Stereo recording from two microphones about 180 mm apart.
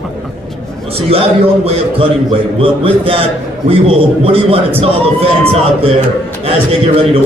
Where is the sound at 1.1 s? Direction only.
35° right (ahead or behind).